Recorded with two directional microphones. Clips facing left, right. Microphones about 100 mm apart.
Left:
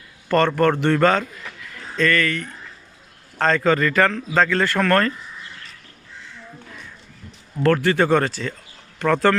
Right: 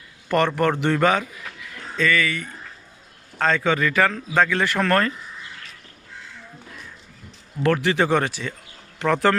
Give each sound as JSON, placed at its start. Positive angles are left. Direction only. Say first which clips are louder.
{"t": 0.3, "sound": "a man's voice", "louder": "left 3 dB", "side_deg": -15}
{"t": 7.6, "sound": "speech", "louder": "left 2 dB", "side_deg": -15}